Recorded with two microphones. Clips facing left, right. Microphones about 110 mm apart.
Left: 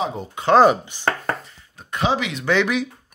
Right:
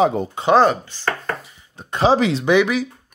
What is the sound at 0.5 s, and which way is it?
Speech, 5° left (ahead or behind).